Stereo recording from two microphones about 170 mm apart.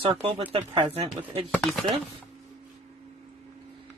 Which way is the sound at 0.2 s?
30° right (ahead or behind).